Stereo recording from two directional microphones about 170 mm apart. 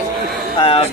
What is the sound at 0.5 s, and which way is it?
Speech, 35° left (ahead or behind).